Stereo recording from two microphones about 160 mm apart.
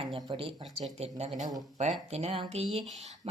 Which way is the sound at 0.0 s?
35° right (ahead or behind).